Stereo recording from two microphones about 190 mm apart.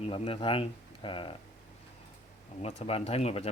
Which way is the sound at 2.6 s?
35° left (ahead or behind).